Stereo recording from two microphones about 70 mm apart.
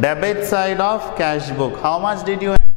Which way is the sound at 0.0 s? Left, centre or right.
Centre.